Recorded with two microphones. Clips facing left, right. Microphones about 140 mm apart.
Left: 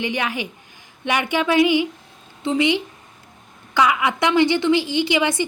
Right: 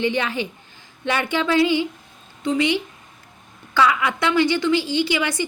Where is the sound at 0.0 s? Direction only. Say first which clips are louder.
Right 2 dB; 15° left (ahead or behind).